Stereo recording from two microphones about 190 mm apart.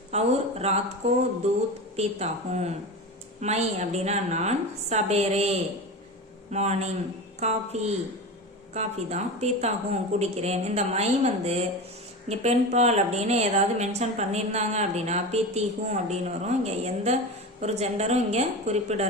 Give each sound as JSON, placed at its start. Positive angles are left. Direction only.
{"t": 0.1, "sound": "a woman's voice", "side_deg": -35}